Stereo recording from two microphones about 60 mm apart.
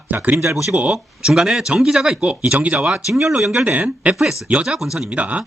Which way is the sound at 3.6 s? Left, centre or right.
Right.